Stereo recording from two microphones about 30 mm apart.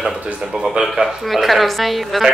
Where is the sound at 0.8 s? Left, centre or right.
Centre.